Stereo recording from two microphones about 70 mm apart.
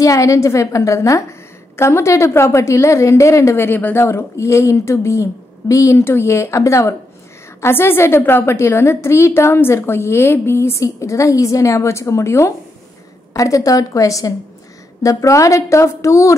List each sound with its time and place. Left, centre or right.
0.0 s a woman's voice: left
3.5 s a woman's voice: left
4.0 s a woman's voice: left
6.0 s a woman's voice: left
7.6 s a woman's voice: left